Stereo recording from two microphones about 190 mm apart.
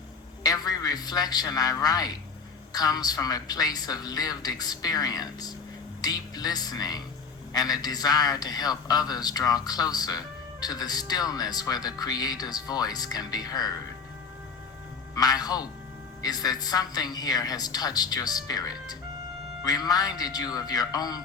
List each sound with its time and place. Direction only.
0.4 s a man's voice: 20° left (ahead or behind)
15.1 s a man's voice: 20° left (ahead or behind)